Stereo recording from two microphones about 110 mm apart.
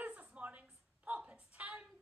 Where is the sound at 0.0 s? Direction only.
10° right (ahead or behind).